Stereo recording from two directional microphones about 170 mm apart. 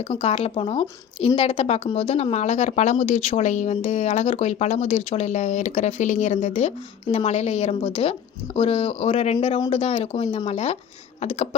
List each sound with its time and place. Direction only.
0.0 s speech: 35° left (ahead or behind)